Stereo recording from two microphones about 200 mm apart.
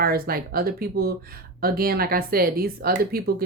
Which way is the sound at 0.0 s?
50° right (ahead or behind).